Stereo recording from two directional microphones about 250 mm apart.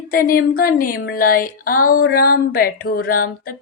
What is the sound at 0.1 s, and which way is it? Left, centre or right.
Speech, left.